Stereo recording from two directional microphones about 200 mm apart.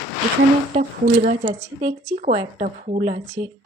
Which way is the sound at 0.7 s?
40° right (ahead or behind).